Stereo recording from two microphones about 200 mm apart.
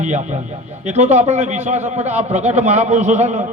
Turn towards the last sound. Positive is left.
turn(degrees=-35)  # may be behind; listen again after turning